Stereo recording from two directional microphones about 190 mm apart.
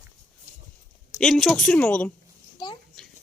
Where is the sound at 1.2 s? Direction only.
Centre (ahead or behind).